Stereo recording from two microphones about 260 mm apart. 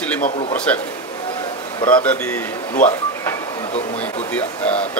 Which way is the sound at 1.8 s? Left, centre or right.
Centre.